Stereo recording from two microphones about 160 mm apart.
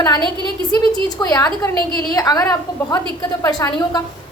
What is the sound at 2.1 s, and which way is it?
A woman's voice, 20° left (ahead or behind).